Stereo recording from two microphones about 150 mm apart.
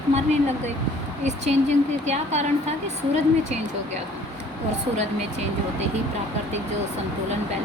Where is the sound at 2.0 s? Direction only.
50° right (ahead or behind).